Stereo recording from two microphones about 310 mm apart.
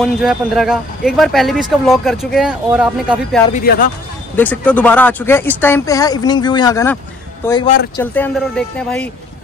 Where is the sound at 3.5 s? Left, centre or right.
Left.